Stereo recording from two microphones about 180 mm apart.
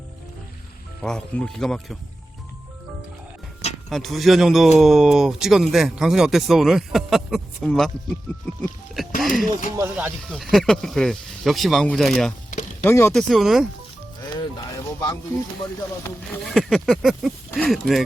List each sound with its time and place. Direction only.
1.0 s speech: 5° left (ahead or behind)
3.8 s speech: centre (ahead or behind)
9.2 s speech: centre (ahead or behind)
9.7 s speech: 10° right (ahead or behind)
12.8 s speech: 15° left (ahead or behind)
13.1 s speech: centre (ahead or behind)
14.3 s a sound: 20° left (ahead or behind)
16.4 s speech: centre (ahead or behind)